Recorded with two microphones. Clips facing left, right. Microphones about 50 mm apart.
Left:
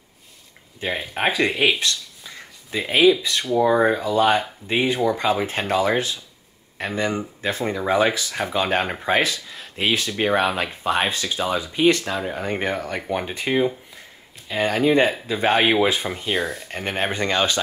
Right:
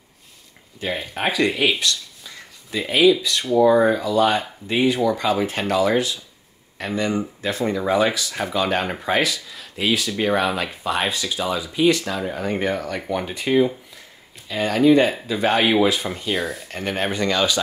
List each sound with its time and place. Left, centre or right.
0.7 s speech: left
2.9 s speech: left
16.3 s speech: centre
16.7 s speech: left